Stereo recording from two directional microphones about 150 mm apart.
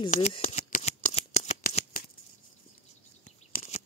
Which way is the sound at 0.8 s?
45° left (ahead or behind).